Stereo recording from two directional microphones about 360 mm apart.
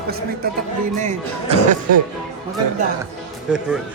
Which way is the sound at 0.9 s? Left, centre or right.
Centre.